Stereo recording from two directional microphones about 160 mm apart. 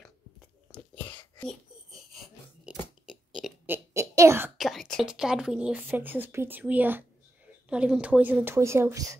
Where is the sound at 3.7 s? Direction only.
15° right (ahead or behind).